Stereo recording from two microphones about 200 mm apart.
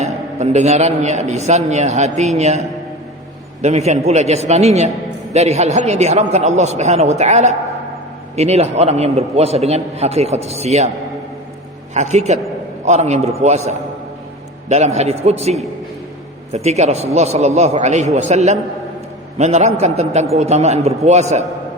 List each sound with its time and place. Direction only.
0.0 s a man's voice: 35° right (ahead or behind)
11.9 s a man's voice: 35° right (ahead or behind)